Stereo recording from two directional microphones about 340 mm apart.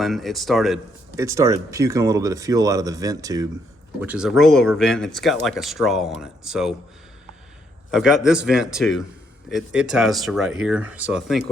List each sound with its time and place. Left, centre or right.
0.0 s speech: centre
7.9 s speech: centre